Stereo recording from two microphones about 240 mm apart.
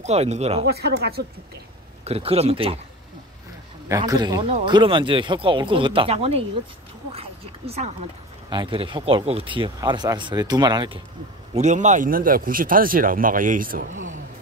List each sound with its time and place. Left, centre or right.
0.0 s speech: right
0.7 s speech: right
2.0 s speech: right
3.9 s speech: centre
11.5 s speech: right